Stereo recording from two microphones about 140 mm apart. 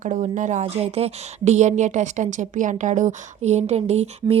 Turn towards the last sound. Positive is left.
turn(degrees=-50)  # may be behind; listen again after turning